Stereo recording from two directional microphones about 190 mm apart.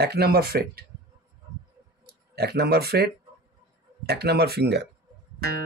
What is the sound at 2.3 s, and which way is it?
Speech, 55° right (ahead or behind).